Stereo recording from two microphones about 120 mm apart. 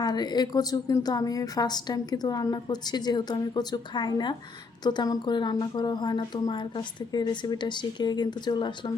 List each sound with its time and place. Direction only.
0.0 s a woman's voice: 35° left (ahead or behind)